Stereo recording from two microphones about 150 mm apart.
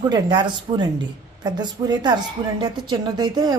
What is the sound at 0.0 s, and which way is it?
A woman's voice, 30° right (ahead or behind).